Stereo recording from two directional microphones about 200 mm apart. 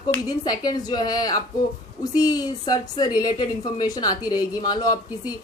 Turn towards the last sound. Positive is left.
turn(degrees=20)  # may be behind; listen again after turning